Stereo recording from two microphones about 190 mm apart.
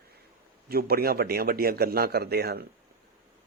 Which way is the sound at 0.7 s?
55° right (ahead or behind).